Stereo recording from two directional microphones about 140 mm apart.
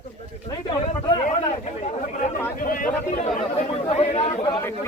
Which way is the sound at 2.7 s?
75° left (ahead or behind).